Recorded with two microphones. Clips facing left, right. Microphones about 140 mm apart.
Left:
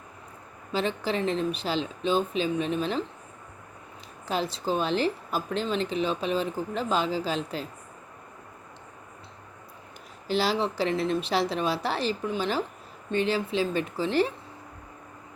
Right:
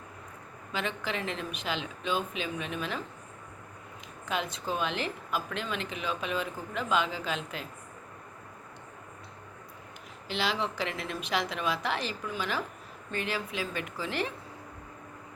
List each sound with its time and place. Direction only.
0.7 s speech: 35° left (ahead or behind)
4.3 s speech: 35° left (ahead or behind)
10.2 s a woman's voice: 35° left (ahead or behind)